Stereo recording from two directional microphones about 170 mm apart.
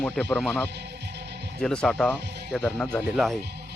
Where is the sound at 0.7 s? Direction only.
85° right.